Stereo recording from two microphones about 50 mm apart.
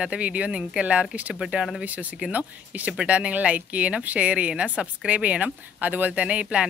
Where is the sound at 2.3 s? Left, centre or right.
Right.